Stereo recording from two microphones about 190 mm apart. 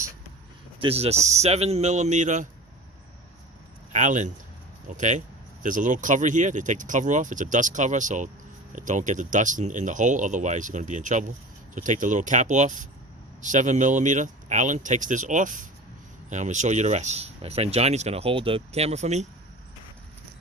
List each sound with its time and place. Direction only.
0.8 s speech: 30° right (ahead or behind)
3.9 s speech: 40° right (ahead or behind)